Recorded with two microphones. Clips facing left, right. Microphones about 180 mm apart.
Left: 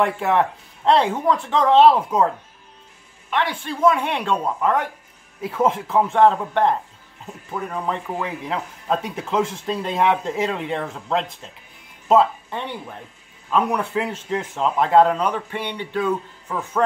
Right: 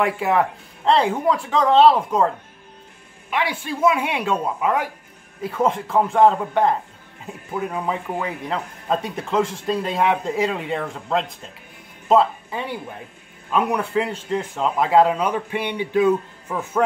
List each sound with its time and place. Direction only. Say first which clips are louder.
0.0 s a man's voice: even; centre (ahead or behind)
3.3 s speech: even; 10° right (ahead or behind)
5.4 s a man's voice: even; 5° left (ahead or behind)